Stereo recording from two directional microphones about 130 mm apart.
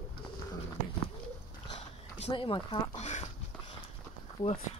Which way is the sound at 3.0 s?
65° left (ahead or behind).